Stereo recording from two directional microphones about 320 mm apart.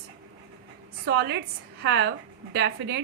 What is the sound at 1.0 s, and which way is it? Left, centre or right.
A woman's voice, right.